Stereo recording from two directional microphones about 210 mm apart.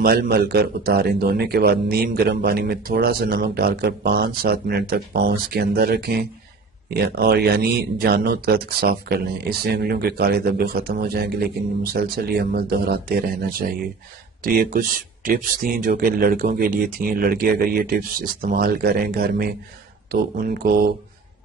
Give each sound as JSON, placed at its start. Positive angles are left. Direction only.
{"t": 0.0, "sound": "speech", "side_deg": -45}